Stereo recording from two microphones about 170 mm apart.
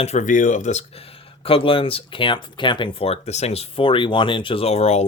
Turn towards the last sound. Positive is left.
turn(degrees=40)  # may be behind; listen again after turning